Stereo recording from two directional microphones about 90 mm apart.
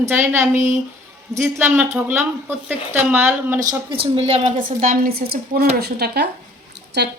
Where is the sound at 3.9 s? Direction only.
90° right.